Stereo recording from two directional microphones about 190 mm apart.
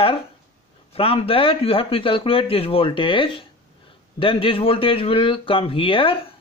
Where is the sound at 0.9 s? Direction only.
30° left (ahead or behind).